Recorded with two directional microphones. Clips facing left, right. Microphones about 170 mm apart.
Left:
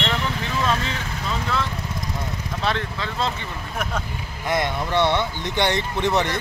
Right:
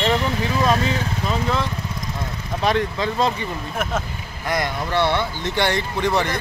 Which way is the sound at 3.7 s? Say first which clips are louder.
Right 2 dB; 5° right (ahead or behind).